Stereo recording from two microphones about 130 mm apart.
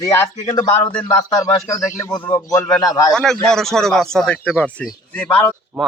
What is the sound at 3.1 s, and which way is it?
A man's voice, 5° left (ahead or behind).